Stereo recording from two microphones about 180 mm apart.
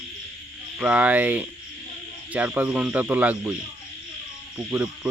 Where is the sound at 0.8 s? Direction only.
5° right (ahead or behind).